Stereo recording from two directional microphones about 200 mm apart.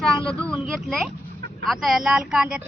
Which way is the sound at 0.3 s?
5° left (ahead or behind).